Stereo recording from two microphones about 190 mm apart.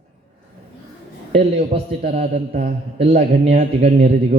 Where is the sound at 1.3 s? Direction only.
35° right (ahead or behind).